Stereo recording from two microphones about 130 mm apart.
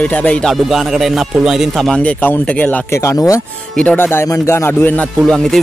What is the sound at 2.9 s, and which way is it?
Speech, 20° left (ahead or behind).